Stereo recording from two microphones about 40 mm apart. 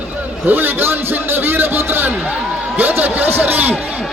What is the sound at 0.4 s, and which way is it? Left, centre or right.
A man's voice, right.